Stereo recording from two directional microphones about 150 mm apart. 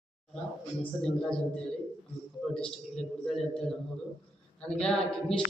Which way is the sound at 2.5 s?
5° left (ahead or behind).